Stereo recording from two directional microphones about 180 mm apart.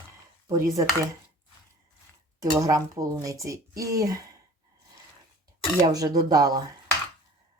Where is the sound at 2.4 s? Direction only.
20° right (ahead or behind).